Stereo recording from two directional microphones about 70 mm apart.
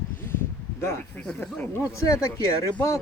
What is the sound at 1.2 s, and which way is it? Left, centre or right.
Speech, centre.